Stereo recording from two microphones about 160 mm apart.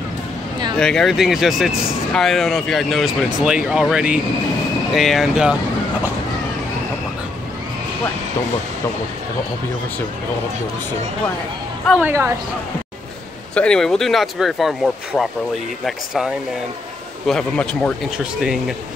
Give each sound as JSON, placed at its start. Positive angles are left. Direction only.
{"t": 0.7, "sound": "speech", "side_deg": 5}
{"t": 12.0, "sound": "speech", "side_deg": -15}
{"t": 13.6, "sound": "speech", "side_deg": 5}
{"t": 17.3, "sound": "speech", "side_deg": 5}